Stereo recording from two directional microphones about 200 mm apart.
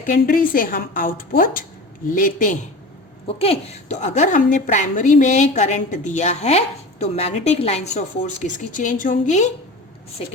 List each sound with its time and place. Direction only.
0.0 s a woman's voice: 45° left (ahead or behind)
3.2 s a woman's voice: 30° left (ahead or behind)